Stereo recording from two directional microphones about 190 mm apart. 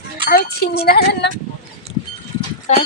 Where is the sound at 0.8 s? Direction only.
55° left (ahead or behind).